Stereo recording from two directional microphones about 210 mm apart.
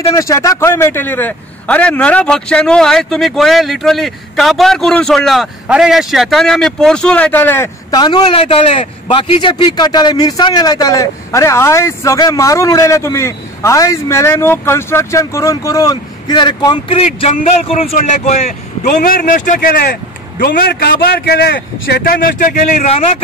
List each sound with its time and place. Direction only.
0.1 s a man's voice: 15° left (ahead or behind); by 23.0 s 30° left (ahead or behind)